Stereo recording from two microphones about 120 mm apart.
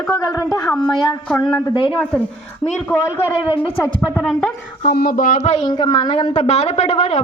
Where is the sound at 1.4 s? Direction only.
45° left (ahead or behind).